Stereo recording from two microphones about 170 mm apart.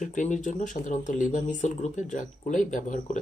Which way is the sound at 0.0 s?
45° left (ahead or behind).